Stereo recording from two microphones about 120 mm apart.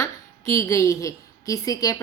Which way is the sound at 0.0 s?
25° left (ahead or behind).